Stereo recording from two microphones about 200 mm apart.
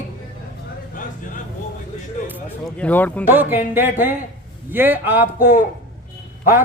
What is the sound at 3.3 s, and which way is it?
A man's voice, 10° right (ahead or behind).